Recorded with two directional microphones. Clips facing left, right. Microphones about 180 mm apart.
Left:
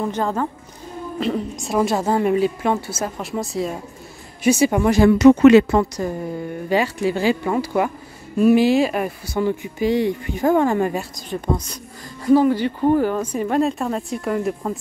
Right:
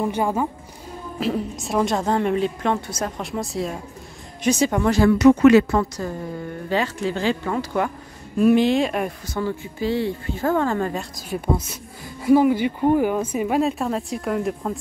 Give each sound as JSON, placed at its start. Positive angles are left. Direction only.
{"t": 0.0, "sound": "a woman's voice", "side_deg": -10}
{"t": 11.1, "sound": "speech", "side_deg": -5}